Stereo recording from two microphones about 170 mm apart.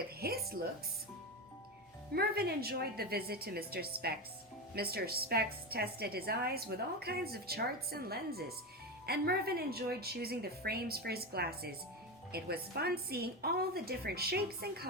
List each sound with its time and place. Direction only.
0.2 s music: 65° right (ahead or behind)
2.1 s a woman's voice: 65° right (ahead or behind)